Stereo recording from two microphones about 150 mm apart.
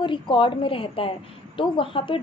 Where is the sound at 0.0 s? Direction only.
30° left (ahead or behind).